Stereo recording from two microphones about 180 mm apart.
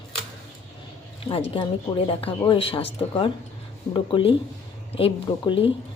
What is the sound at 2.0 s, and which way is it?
A woman's voice, 30° left (ahead or behind).